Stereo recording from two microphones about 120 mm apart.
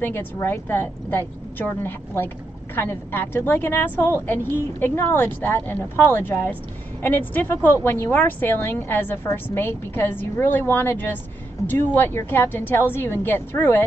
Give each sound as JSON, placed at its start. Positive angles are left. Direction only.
{"t": 0.0, "sound": "a woman's voice", "side_deg": 20}